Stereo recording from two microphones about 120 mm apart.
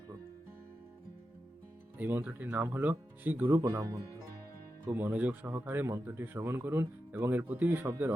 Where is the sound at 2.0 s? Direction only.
15° right (ahead or behind).